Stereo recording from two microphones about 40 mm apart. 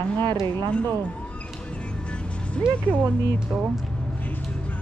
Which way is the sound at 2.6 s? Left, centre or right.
Left.